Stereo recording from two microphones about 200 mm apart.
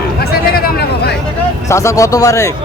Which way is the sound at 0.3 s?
50° left (ahead or behind).